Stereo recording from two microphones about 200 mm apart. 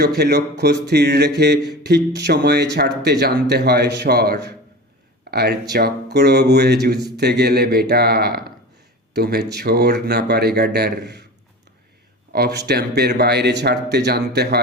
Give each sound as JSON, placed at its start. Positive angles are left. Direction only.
{"t": 0.0, "sound": "a man's voice", "side_deg": -55}
{"t": 12.3, "sound": "speech", "side_deg": -55}